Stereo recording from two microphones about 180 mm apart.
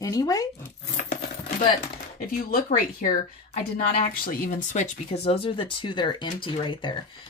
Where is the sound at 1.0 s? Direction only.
50° left (ahead or behind).